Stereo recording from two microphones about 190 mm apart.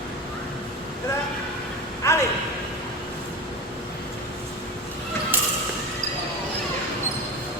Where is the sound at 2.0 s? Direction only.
15° left (ahead or behind).